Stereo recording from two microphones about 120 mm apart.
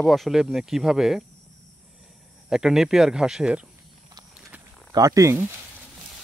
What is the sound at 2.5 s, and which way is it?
Speech, 5° right (ahead or behind).